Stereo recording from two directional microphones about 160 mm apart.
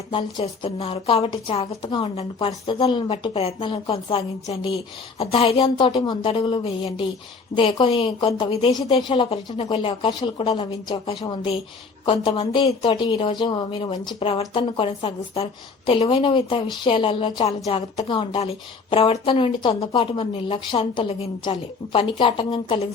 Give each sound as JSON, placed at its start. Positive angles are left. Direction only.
{"t": 0.2, "sound": "a woman's voice", "side_deg": 40}